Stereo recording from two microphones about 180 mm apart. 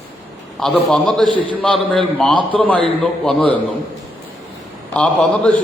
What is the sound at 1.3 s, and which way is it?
Speech, 25° right (ahead or behind).